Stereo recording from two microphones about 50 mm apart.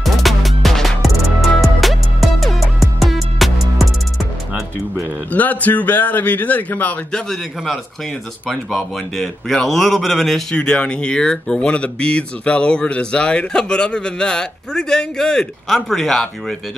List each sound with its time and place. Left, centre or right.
0.0 s music: centre
5.3 s a man's voice: left
7.2 s a man's voice: centre
10.5 s speech: centre